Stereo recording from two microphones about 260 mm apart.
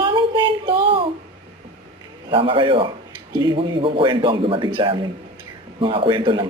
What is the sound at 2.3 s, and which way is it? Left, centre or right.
Speech, centre.